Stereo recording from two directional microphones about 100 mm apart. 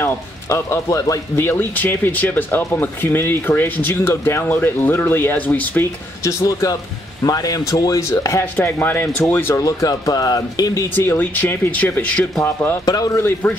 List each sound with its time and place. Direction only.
0.0 s speech: 25° left (ahead or behind)
6.2 s speech: 35° left (ahead or behind)
8.5 s speech: 20° left (ahead or behind)
9.6 s speech: 35° left (ahead or behind)
11.1 s speech: 20° left (ahead or behind)
12.8 s speech: 40° left (ahead or behind)
13.2 s speech: 25° left (ahead or behind)